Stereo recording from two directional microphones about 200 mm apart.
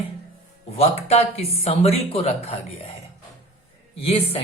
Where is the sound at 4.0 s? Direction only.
30° left (ahead or behind).